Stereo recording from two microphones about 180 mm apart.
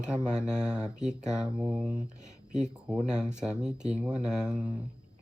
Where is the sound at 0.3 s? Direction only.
5° right (ahead or behind).